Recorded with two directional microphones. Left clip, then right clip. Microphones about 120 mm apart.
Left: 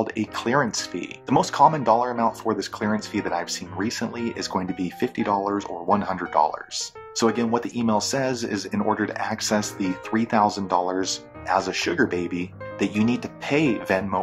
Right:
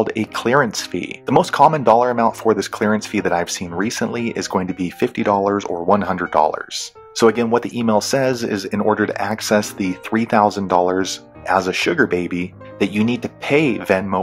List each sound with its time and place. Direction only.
0.0 s speech: 55° right (ahead or behind)